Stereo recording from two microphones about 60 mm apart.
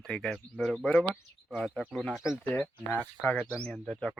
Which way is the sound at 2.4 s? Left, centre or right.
Left.